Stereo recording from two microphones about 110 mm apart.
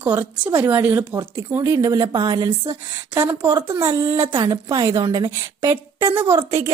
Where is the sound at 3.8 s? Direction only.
25° right (ahead or behind).